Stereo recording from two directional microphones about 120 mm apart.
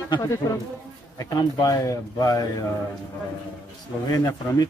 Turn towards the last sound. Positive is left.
turn(degrees=30)  # may be behind; listen again after turning